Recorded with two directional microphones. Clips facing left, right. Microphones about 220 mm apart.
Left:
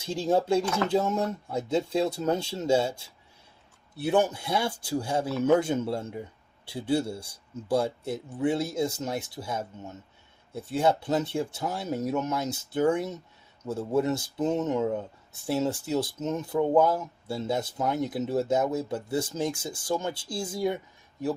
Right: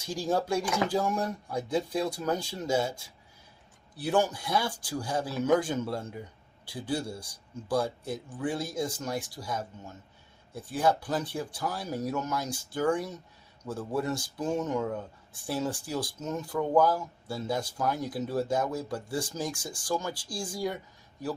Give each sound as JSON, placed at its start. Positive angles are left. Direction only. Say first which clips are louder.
{"t": 0.0, "sound": "speech", "louder": "left 4 dB", "side_deg": 25}
{"t": 3.9, "sound": "speech", "louder": "left 3 dB", "side_deg": 25}